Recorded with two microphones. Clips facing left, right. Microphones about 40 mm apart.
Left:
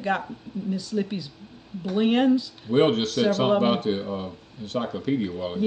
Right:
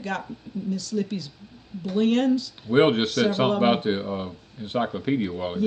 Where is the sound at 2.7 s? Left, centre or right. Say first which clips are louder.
Right 1 dB; right.